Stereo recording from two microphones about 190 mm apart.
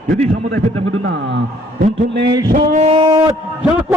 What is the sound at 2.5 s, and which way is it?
Male singing, 45° right (ahead or behind).